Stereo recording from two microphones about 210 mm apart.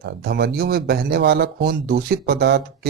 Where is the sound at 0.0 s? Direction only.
50° right (ahead or behind).